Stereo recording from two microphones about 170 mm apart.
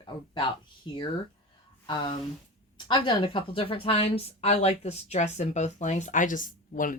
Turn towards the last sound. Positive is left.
turn(degrees=50)  # may be behind; listen again after turning